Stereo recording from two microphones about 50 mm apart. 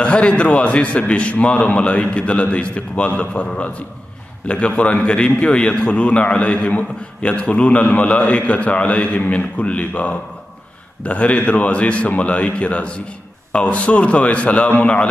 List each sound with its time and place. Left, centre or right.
0.0 s a man's voice: left